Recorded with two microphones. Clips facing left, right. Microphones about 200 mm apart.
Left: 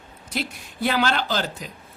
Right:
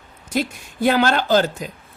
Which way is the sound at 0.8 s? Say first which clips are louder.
Right 5 dB; 45° right (ahead or behind).